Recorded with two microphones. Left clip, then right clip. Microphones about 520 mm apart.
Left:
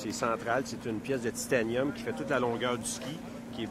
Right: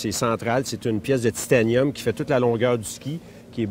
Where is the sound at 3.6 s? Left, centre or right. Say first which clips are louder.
Right 11 dB; right.